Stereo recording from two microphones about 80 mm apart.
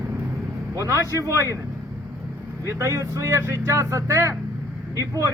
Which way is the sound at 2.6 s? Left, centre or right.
Right.